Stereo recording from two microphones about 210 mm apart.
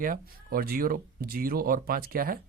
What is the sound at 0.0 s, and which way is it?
Speech, 45° right (ahead or behind).